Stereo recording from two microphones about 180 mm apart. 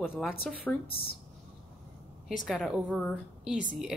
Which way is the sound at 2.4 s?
Centre (ahead or behind).